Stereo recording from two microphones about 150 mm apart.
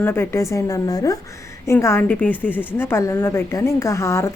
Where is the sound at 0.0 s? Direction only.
15° left (ahead or behind).